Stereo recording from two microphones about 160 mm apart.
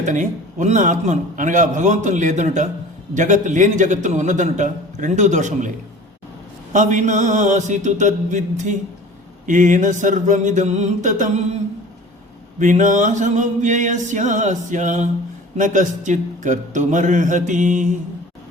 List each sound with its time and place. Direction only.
0.0 s a man's voice: 50° right (ahead or behind)
6.7 s a man's voice: 50° right (ahead or behind)
12.5 s a man's voice: 50° right (ahead or behind)